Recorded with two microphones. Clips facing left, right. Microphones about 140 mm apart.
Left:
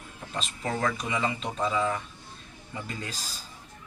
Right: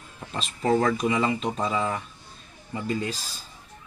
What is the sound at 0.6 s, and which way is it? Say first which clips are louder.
Speech: right 8 dB; 35° right (ahead or behind).